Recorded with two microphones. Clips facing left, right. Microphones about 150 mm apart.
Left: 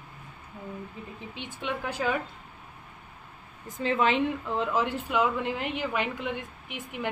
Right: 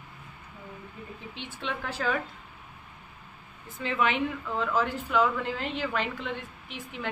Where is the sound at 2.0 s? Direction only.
5° left (ahead or behind).